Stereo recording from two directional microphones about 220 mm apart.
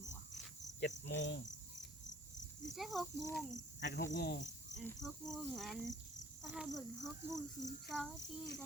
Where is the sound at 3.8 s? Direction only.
50° left (ahead or behind).